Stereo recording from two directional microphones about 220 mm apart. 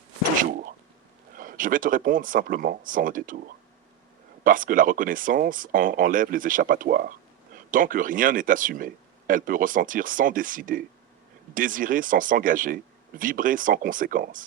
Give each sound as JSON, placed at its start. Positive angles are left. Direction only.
{"t": 1.4, "sound": "speech", "side_deg": -40}
{"t": 4.4, "sound": "speech", "side_deg": -40}